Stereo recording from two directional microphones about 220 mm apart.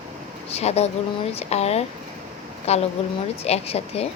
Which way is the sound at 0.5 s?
30° left (ahead or behind).